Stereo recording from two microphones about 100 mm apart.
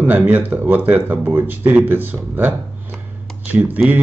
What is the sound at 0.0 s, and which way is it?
Speech, 20° right (ahead or behind).